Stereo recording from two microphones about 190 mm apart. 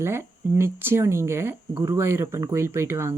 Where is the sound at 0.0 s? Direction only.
15° right (ahead or behind).